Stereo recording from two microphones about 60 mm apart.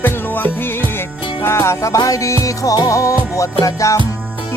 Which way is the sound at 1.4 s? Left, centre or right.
Left.